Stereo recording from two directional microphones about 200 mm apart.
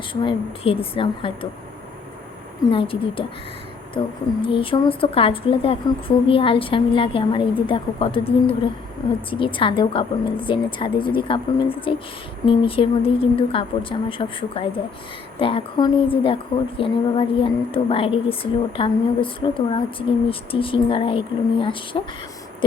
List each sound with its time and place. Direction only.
0.1 s a woman's voice: 25° left (ahead or behind)
2.6 s a woman's voice: 25° left (ahead or behind)